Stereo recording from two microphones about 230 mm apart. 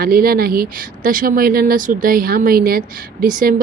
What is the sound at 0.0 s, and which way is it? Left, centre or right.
Speech, right.